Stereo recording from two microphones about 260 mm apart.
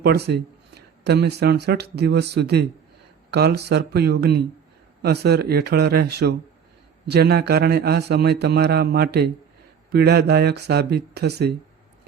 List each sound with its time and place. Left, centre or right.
0.0 s a man's voice: right